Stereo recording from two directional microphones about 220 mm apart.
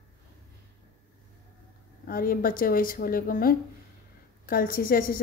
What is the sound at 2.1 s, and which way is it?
A woman's voice, 40° left (ahead or behind).